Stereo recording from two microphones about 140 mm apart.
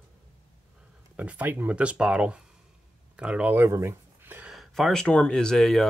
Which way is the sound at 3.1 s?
5° right (ahead or behind).